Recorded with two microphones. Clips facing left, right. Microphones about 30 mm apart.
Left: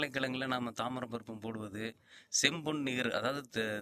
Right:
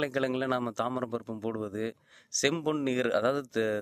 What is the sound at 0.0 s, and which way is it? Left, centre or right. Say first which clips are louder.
A man's voice: right 6 dB; centre.